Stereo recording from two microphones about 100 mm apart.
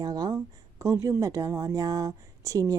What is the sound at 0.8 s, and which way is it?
Speech, 30° right (ahead or behind).